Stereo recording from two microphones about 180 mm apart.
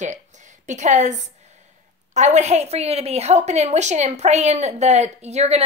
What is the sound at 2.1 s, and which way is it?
A woman's voice, 40° right (ahead or behind).